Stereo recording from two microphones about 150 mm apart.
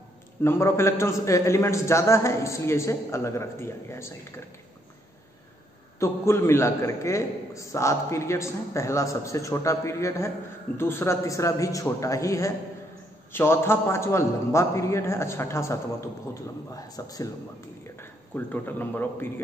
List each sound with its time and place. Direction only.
0.4 s a man's voice: 15° left (ahead or behind)
5.9 s a man's voice: 15° left (ahead or behind)
17.9 s speech: 10° left (ahead or behind)